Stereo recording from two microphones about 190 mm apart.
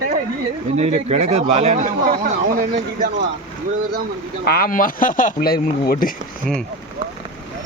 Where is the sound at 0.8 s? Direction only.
35° right (ahead or behind).